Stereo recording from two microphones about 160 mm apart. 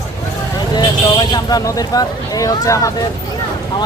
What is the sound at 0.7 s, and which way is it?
Vehicle, 25° left (ahead or behind).